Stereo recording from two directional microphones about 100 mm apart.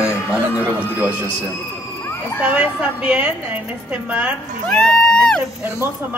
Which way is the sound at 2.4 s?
10° right (ahead or behind).